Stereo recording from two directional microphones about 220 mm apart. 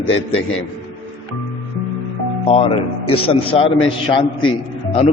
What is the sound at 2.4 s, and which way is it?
A man's voice, 25° left (ahead or behind).